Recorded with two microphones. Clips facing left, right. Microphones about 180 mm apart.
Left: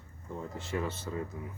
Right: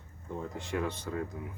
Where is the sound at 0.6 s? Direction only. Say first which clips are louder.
Even; 5° left (ahead or behind).